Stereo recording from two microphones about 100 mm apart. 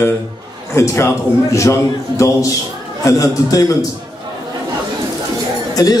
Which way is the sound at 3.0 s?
35° left (ahead or behind).